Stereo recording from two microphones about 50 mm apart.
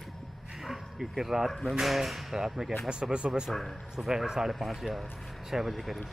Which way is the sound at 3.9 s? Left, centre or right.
Centre.